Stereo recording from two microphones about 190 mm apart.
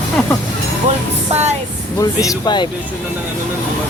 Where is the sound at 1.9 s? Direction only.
15° left (ahead or behind).